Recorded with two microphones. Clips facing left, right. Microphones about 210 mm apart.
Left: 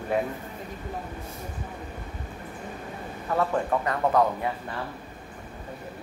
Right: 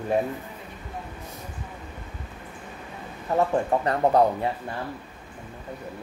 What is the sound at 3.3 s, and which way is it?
Speech, 35° right (ahead or behind).